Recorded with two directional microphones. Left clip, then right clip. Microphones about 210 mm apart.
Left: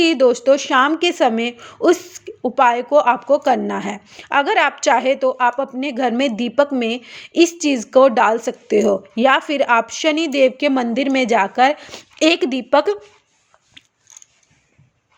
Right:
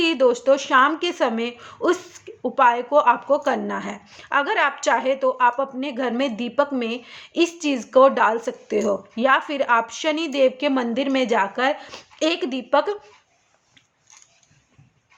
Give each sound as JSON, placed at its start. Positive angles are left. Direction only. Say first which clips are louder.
{"t": 0.0, "sound": "speech", "louder": "left 4 dB", "side_deg": 25}